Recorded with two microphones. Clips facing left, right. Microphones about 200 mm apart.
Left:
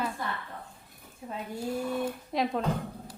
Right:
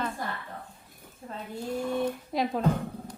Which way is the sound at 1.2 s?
10° left (ahead or behind).